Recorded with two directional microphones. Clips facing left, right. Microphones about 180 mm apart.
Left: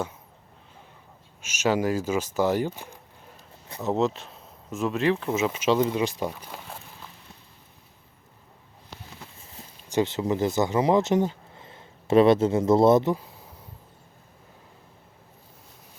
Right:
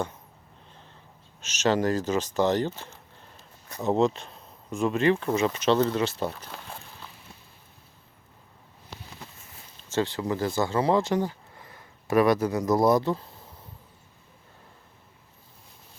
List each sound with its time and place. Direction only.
1.4 s speech: 10° left (ahead or behind)
3.8 s speech: centre (ahead or behind)
9.9 s speech: 20° left (ahead or behind)